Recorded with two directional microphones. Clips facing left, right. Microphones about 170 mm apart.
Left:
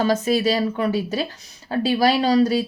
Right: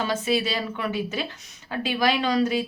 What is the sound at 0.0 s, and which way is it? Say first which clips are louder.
Speech: left 6 dB; 40° left (ahead or behind).